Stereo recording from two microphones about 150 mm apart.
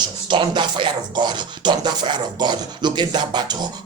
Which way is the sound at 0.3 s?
30° right (ahead or behind).